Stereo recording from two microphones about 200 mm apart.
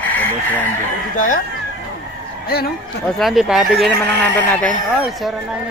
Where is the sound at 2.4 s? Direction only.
50° left (ahead or behind).